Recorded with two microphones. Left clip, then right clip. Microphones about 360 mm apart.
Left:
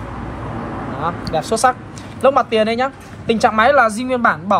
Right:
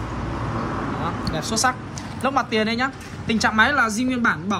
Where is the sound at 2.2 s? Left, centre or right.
Centre.